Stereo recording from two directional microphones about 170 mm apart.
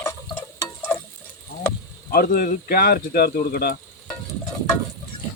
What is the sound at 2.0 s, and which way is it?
Speech, 65° left (ahead or behind).